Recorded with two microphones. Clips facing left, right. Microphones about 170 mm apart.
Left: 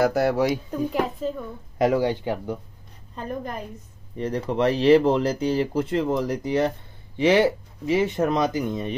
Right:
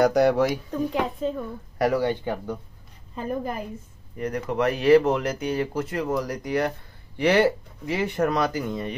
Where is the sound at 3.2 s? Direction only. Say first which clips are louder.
Right 2 dB; 5° right (ahead or behind).